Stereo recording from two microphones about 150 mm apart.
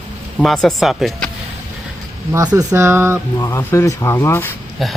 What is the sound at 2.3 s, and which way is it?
Speech, 25° right (ahead or behind).